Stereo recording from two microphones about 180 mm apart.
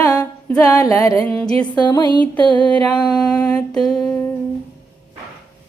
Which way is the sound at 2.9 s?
25° left (ahead or behind).